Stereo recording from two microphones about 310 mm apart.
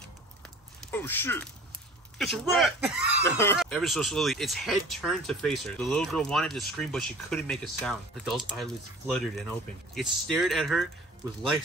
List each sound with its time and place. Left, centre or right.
0.9 s speech: centre